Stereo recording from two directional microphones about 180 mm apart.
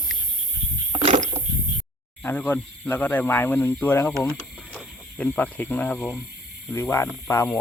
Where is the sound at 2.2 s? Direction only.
10° left (ahead or behind).